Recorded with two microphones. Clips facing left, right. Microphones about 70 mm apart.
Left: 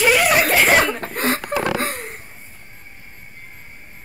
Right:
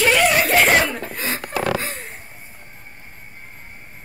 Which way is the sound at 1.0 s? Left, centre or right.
Left.